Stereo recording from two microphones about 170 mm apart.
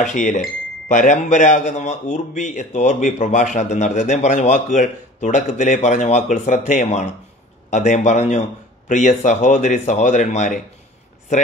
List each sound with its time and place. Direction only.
0.0 s a man's voice: 50° left (ahead or behind)